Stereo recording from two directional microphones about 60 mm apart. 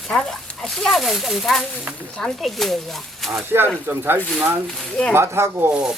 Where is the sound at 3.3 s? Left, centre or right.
Right.